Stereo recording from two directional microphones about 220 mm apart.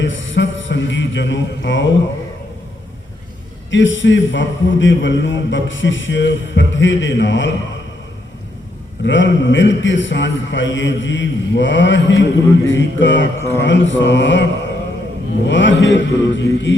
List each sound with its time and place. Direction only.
0.0 s a sound: 60° left (ahead or behind)
3.7 s a man's voice: 55° left (ahead or behind)
9.0 s a man's voice: 55° left (ahead or behind)
15.4 s a man's voice: 55° left (ahead or behind)